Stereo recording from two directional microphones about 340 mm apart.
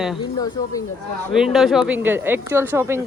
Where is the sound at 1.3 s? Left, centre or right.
Centre.